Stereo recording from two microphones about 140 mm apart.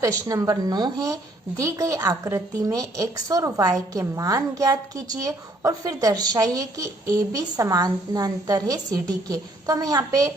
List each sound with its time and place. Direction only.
0.0 s a woman's voice: 25° right (ahead or behind)